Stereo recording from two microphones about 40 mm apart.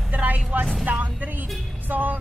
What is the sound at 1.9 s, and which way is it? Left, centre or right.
Music, right.